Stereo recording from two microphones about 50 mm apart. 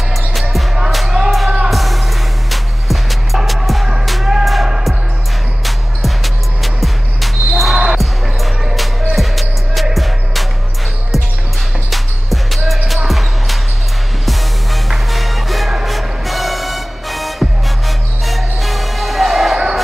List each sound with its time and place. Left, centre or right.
0.3 s music: centre
7.8 s basketball bounce: centre
9.1 s music: centre
11.9 s music: centre